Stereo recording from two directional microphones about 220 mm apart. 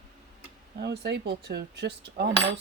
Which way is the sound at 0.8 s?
50° right (ahead or behind).